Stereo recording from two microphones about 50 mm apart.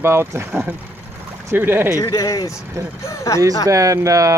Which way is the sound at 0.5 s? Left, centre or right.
Right.